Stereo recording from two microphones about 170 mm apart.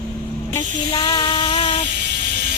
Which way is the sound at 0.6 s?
20° left (ahead or behind).